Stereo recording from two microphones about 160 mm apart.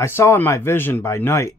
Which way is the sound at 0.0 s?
15° left (ahead or behind).